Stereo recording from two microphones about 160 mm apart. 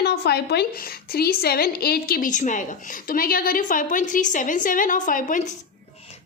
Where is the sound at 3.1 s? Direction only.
65° left (ahead or behind).